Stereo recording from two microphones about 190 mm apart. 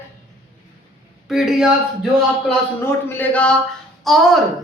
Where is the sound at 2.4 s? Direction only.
10° left (ahead or behind).